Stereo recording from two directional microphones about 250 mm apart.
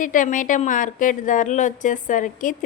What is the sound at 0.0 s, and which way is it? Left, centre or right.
A woman's voice, left.